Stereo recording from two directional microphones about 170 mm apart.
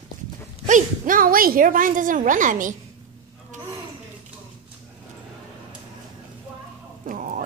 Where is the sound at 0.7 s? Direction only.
50° right (ahead or behind).